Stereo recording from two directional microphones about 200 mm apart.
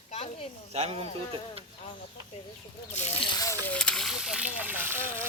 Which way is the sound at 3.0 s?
30° left (ahead or behind).